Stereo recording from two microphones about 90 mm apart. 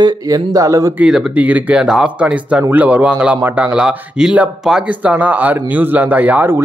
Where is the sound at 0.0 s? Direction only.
45° right (ahead or behind).